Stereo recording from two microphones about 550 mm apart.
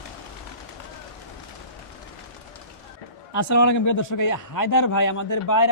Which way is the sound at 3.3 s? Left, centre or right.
Left.